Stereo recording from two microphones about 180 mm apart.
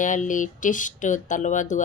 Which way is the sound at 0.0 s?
45° left (ahead or behind).